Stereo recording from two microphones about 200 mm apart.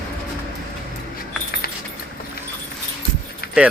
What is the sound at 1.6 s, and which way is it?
Keys jangling, 50° left (ahead or behind).